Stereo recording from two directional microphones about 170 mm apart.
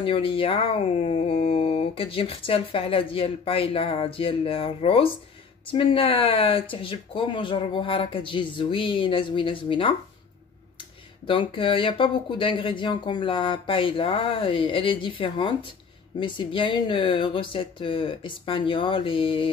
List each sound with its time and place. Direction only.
0.0 s speech: 30° left (ahead or behind)
11.2 s speech: 30° left (ahead or behind)